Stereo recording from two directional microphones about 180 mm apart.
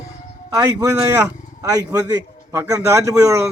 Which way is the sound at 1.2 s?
15° right (ahead or behind).